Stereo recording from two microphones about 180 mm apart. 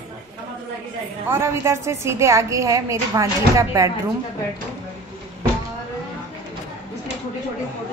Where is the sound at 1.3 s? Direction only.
15° right (ahead or behind).